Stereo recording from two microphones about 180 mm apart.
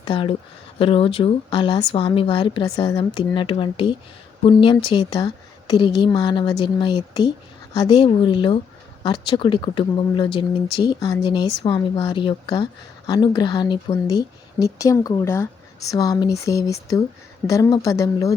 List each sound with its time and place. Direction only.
0.0 s a woman's voice: 30° left (ahead or behind)